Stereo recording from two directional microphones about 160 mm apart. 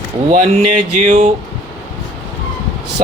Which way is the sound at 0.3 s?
45° right (ahead or behind).